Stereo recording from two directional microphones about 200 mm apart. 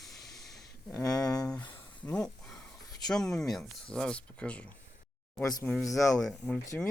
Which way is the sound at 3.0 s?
5° left (ahead or behind).